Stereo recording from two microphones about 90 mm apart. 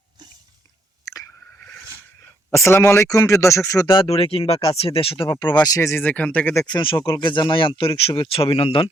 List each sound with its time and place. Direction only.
1.0 s chewing: 40° left (ahead or behind)
2.5 s a man's voice: 30° left (ahead or behind)
4.0 s speech: 90° left
5.6 s a man's voice: 40° left (ahead or behind)
5.9 s speech: 20° left (ahead or behind)
6.8 s speech: 70° left (ahead or behind)
7.8 s speech: 90° left